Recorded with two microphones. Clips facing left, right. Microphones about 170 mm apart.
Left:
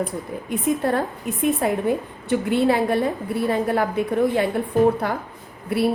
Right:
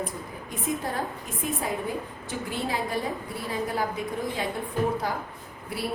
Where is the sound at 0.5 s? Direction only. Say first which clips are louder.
Left 9 dB; 65° left (ahead or behind).